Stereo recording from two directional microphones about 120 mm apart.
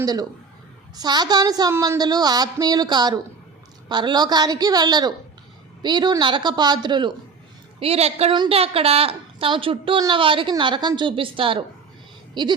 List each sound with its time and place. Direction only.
0.0 s a woman's voice: 35° right (ahead or behind)
7.8 s a woman's voice: 60° right (ahead or behind)
8.3 s a woman's voice: 45° right (ahead or behind)